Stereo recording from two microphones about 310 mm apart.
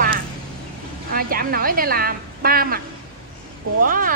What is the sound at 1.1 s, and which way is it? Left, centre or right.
A woman's voice, right.